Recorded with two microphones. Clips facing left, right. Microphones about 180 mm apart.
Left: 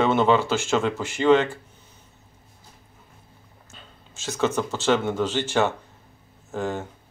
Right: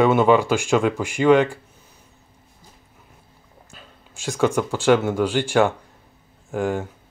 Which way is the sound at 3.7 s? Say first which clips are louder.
Right 1 dB; 15° right (ahead or behind).